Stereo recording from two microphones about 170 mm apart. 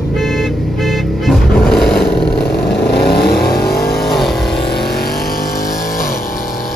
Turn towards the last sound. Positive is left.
turn(degrees=55)  # may be behind; listen again after turning